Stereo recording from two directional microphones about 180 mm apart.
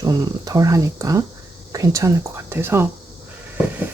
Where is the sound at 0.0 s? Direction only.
20° right (ahead or behind).